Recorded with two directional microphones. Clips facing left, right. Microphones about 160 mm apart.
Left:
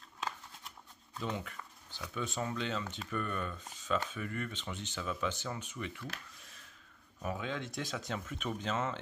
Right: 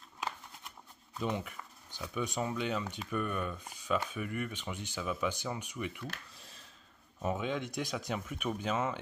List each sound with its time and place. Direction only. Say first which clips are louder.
1.2 s speech: right 3 dB; 15° right (ahead or behind)
6.3 s a sound: right 3 dB; 30° right (ahead or behind)
7.2 s speech: right 4 dB; 20° right (ahead or behind)